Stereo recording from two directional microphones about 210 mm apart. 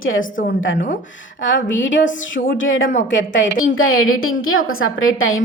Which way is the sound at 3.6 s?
80° left.